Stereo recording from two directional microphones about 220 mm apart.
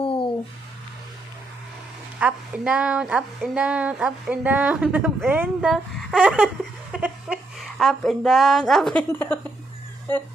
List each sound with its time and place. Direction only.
0.0 s a sound: 25° left (ahead or behind)
2.1 s speech: 5° right (ahead or behind)
6.9 s chuckle: 5° right (ahead or behind)
7.8 s speech: centre (ahead or behind)